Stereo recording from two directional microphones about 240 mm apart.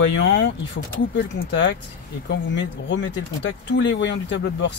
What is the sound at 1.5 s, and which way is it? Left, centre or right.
Speech, left.